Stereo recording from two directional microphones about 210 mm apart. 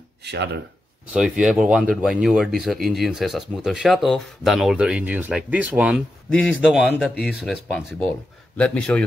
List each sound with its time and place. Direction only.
0.2 s speech: 55° right (ahead or behind)
1.1 s speech: 5° right (ahead or behind)